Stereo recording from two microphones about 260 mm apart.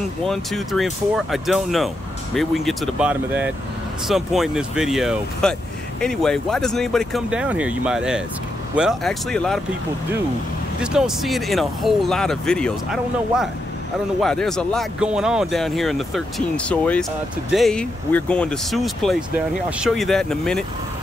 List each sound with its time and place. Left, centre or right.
0.2 s speech: centre
10.8 s speech: centre